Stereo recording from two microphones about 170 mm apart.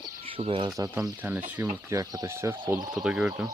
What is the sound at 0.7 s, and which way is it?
Speech, 20° right (ahead or behind).